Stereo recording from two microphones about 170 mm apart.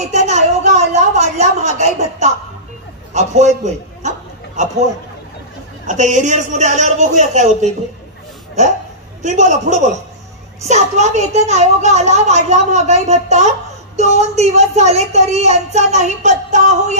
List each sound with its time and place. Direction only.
0.1 s a sound: 45° right (ahead or behind)
3.1 s a man's voice: 45° right (ahead or behind)
5.9 s a man's voice: 45° right (ahead or behind)